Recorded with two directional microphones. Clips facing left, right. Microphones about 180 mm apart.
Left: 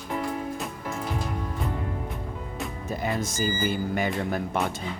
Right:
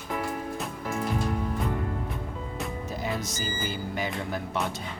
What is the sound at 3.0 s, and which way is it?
Music, 50° left (ahead or behind).